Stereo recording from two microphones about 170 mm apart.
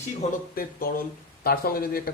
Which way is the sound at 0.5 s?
60° left (ahead or behind).